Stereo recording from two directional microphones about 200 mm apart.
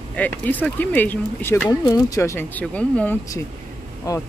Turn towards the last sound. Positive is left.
turn(degrees=15)  # may be behind; listen again after turning